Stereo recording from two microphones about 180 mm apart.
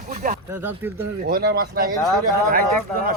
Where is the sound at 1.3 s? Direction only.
55° right (ahead or behind).